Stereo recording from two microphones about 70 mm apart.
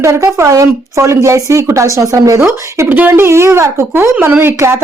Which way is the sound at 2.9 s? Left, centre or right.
Right.